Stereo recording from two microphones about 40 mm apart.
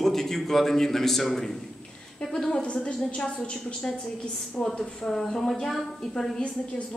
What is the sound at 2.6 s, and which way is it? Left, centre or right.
Speech, left.